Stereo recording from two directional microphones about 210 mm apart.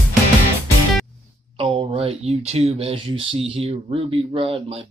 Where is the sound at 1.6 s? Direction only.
25° right (ahead or behind).